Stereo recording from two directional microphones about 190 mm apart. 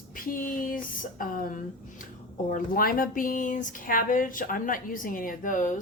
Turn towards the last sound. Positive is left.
turn(degrees=45)  # may be behind; listen again after turning